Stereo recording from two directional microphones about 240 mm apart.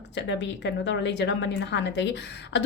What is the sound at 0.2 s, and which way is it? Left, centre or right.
A woman's voice, left.